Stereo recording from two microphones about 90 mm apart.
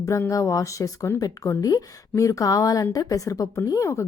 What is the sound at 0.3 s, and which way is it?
Speech, 40° left (ahead or behind).